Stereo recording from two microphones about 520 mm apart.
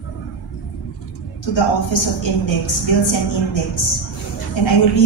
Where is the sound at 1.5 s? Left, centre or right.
Left.